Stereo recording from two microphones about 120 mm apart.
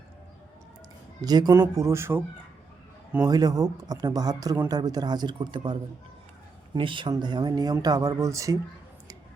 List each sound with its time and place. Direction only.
1.2 s speech: 35° right (ahead or behind)
3.2 s speech: 30° right (ahead or behind)
6.7 s speech: 45° right (ahead or behind); by 8.5 s 25° right (ahead or behind)